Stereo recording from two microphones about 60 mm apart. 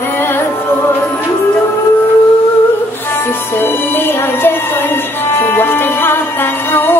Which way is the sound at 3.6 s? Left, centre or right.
Left.